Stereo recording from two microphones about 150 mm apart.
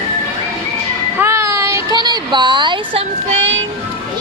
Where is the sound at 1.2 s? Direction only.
15° right (ahead or behind); by 3.4 s 40° right (ahead or behind).